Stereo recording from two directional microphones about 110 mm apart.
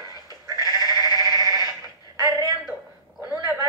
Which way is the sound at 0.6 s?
35° left (ahead or behind).